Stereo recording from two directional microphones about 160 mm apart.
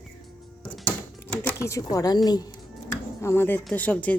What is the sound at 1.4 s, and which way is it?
Speech, 15° left (ahead or behind).